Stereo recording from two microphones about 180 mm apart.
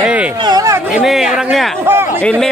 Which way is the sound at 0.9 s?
5° right (ahead or behind).